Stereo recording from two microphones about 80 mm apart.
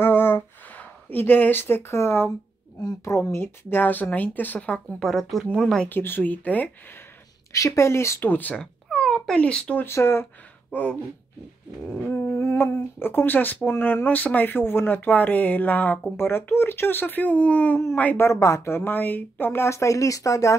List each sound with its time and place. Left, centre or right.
0.0 s a sound: left
3.1 s speech: left; by 4.8 s centre
5.0 s speech: centre
5.9 s speech: left
7.5 s a woman's voice: left
8.2 s speech: left
8.5 s a sound: centre
9.8 s a woman's voice: left
10.7 s speech: centre
12.0 s speech: left
18.1 s a woman's voice: left